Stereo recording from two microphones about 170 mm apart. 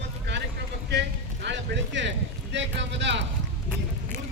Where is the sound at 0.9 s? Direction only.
90° right.